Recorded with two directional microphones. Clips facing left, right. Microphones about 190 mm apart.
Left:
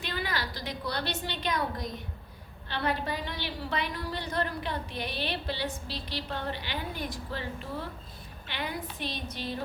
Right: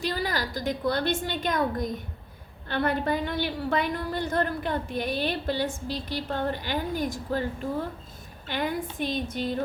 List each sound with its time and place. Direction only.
0.0 s a woman's voice: 40° right (ahead or behind)